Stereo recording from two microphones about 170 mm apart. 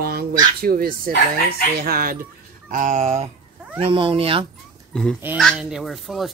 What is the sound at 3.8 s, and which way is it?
Speech, 30° right (ahead or behind).